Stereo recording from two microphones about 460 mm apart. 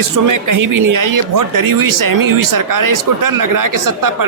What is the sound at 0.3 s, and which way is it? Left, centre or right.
Speech, right.